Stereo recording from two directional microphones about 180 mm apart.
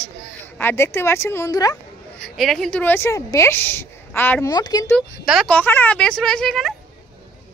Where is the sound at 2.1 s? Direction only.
Centre (ahead or behind).